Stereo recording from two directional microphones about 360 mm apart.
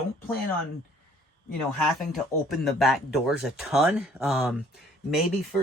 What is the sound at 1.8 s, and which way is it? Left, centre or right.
Speech, centre.